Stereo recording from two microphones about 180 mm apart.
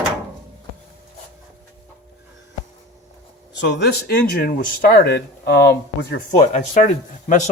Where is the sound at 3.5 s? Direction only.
75° left (ahead or behind).